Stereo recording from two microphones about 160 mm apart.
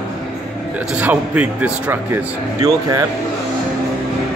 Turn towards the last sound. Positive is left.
turn(degrees=-20)  # may be behind; listen again after turning